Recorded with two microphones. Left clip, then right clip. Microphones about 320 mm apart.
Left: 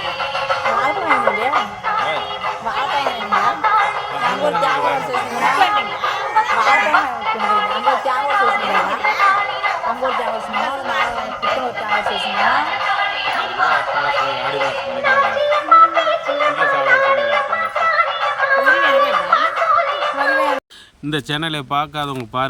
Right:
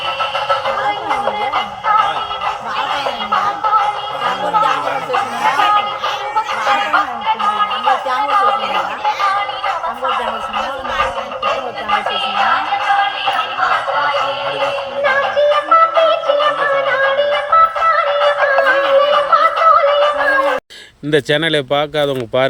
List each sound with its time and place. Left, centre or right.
1.0 s music: right
3.3 s music: right
6.3 s chatter: centre
8.3 s chatter: centre
13.2 s a sound: centre
21.1 s speech: centre